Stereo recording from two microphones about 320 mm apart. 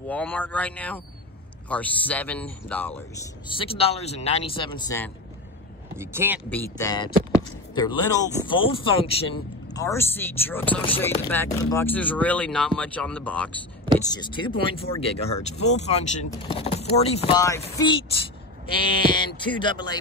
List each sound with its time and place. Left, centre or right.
0.1 s speech: centre
3.4 s speech: centre
5.9 s speech: centre
6.5 s speech: centre